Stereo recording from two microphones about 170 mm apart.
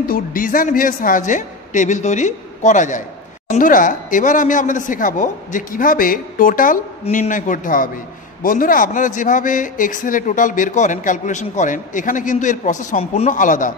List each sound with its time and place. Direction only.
0.1 s speech: 55° left (ahead or behind)